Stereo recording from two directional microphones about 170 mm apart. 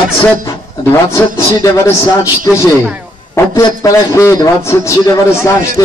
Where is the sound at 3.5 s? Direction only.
15° left (ahead or behind).